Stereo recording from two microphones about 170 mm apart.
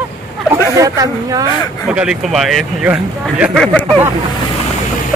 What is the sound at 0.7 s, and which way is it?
Speech, 20° right (ahead or behind).